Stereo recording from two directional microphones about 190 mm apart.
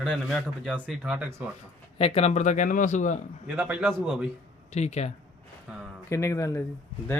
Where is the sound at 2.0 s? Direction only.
35° left (ahead or behind).